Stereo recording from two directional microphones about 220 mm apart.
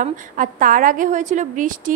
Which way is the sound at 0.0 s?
35° right (ahead or behind).